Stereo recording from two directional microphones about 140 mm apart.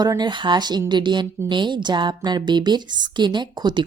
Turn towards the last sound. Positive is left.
turn(degrees=-30)  # may be behind; listen again after turning